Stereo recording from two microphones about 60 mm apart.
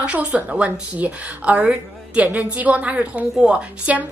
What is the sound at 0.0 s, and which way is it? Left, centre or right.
A woman's voice, centre.